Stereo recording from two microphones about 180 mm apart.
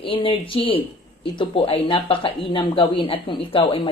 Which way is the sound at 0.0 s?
30° left (ahead or behind).